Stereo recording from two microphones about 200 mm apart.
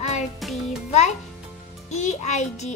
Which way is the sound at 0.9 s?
35° left (ahead or behind).